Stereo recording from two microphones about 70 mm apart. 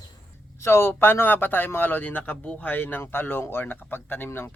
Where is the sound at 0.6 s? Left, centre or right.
Left.